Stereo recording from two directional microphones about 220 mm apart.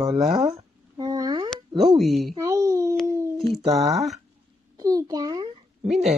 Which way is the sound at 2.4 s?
15° right (ahead or behind).